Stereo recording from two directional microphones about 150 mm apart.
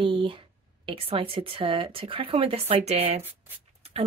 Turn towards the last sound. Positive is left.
turn(degrees=-40)  # may be behind; listen again after turning